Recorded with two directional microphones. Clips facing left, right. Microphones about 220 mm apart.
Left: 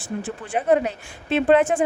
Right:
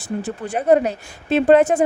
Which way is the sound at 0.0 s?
40° right (ahead or behind).